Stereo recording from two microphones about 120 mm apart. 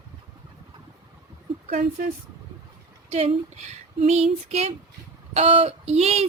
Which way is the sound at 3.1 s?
65° right (ahead or behind).